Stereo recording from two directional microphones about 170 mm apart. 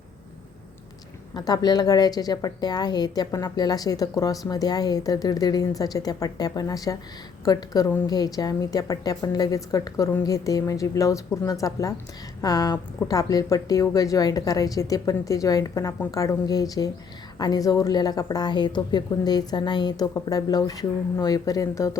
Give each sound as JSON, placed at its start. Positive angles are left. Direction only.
{"t": 1.3, "sound": "a woman's voice", "side_deg": 25}